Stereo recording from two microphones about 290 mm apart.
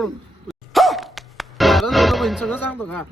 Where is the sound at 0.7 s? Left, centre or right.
Centre.